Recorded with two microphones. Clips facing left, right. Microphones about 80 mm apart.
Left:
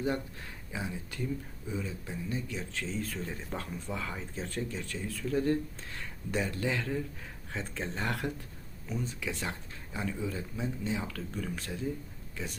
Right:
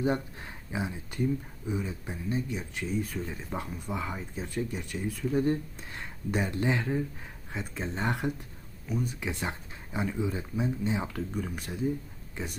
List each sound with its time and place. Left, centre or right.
0.0 s speech: right